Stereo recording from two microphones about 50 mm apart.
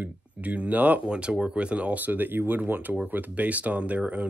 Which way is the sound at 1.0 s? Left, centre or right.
Right.